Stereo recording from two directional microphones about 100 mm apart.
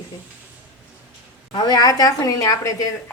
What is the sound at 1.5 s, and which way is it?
A woman's voice, 45° left (ahead or behind).